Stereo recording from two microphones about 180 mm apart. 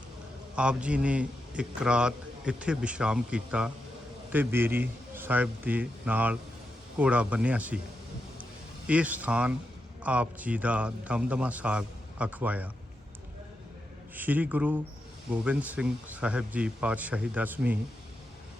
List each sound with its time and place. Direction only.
0.5 s a man's voice: 5° right (ahead or behind)
8.9 s a man's voice: 10° right (ahead or behind)
14.2 s a man's voice: 10° right (ahead or behind)